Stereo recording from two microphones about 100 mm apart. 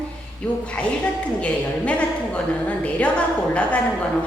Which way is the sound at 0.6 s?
10° left (ahead or behind).